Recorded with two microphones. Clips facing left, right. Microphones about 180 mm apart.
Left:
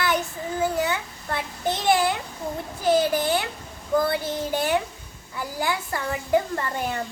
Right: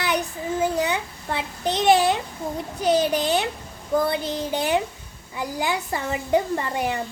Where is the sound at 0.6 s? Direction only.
20° right (ahead or behind).